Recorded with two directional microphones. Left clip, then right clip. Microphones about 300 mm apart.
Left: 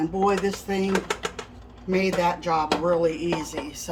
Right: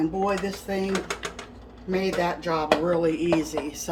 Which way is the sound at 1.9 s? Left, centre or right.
Centre.